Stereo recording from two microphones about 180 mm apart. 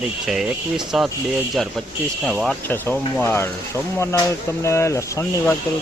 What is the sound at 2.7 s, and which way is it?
Speech, 10° left (ahead or behind).